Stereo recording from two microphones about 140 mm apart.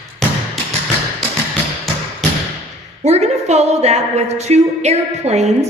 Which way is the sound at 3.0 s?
55° right (ahead or behind).